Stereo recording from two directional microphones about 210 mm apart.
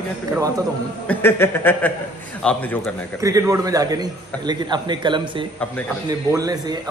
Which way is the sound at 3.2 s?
15° right (ahead or behind).